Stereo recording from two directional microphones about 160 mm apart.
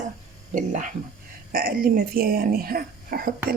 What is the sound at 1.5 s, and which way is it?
Speech, 65° right (ahead or behind).